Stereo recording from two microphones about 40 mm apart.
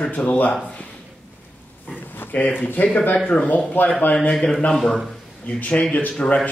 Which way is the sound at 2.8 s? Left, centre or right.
Left.